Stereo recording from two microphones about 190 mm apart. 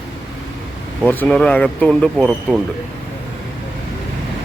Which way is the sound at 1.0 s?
10° left (ahead or behind).